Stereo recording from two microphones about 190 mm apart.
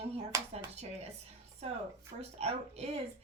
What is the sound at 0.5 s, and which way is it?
A woman's voice, 35° right (ahead or behind).